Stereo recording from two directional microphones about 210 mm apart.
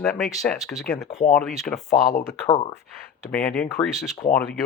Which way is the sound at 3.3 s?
5° left (ahead or behind).